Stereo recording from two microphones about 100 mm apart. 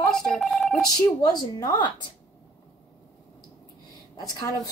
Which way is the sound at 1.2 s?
40° left (ahead or behind).